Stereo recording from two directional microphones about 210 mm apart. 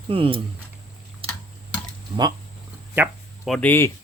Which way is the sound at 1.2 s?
25° right (ahead or behind).